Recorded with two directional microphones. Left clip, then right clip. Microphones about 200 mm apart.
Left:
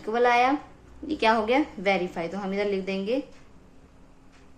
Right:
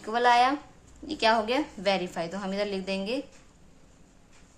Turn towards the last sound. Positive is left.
turn(degrees=-20)  # may be behind; listen again after turning